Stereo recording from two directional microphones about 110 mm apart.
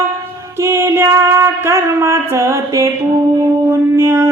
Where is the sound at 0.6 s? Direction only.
25° right (ahead or behind).